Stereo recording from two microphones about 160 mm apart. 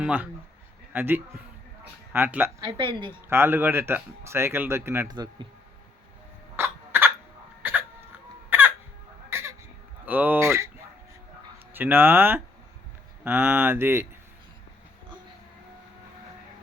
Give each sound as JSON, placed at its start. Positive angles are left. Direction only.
{"t": 0.0, "sound": "speech", "side_deg": -10}
{"t": 2.6, "sound": "speech", "side_deg": -30}
{"t": 3.2, "sound": "speech", "side_deg": -15}
{"t": 5.1, "sound": "speech", "side_deg": -25}
{"t": 6.6, "sound": "a sound", "side_deg": -15}
{"t": 7.6, "sound": "hiccup", "side_deg": -10}
{"t": 8.4, "sound": "chicken", "side_deg": -10}
{"t": 10.1, "sound": "speech", "side_deg": -10}
{"t": 11.7, "sound": "speech", "side_deg": -10}